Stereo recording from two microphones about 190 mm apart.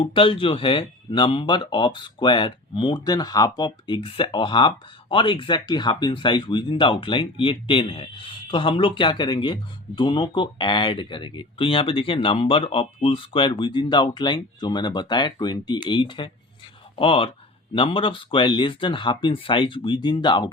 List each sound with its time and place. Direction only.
0.0 s speech: 30° left (ahead or behind)